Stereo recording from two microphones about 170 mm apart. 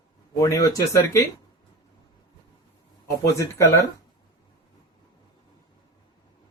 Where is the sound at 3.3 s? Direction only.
15° left (ahead or behind).